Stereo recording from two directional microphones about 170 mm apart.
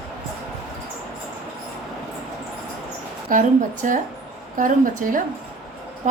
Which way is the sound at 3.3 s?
50° right (ahead or behind).